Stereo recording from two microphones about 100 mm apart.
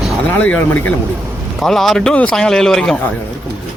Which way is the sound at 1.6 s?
5° left (ahead or behind).